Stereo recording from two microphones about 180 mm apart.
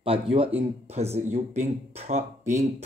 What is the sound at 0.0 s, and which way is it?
Speech, 30° right (ahead or behind).